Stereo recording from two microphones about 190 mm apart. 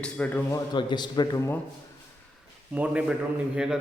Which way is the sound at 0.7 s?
25° left (ahead or behind).